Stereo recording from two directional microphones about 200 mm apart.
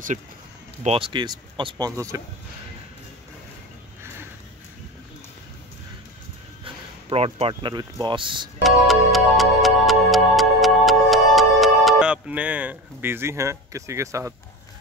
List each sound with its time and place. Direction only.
0.8 s speech: 25° right (ahead or behind)
6.6 s speech: 25° right (ahead or behind)
8.6 s music: centre (ahead or behind)